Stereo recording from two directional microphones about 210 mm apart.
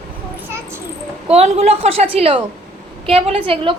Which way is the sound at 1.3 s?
30° right (ahead or behind).